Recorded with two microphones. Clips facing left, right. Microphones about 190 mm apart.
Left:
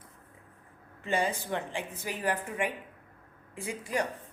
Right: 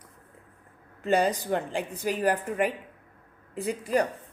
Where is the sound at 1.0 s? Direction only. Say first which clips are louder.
Right 6 dB; 40° right (ahead or behind).